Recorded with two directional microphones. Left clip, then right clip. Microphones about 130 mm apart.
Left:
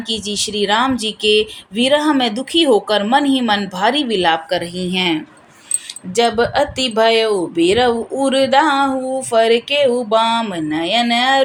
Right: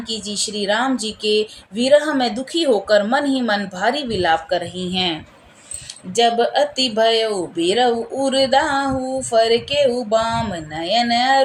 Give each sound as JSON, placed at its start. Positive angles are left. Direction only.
{"t": 0.3, "sound": "a woman's voice", "side_deg": 40}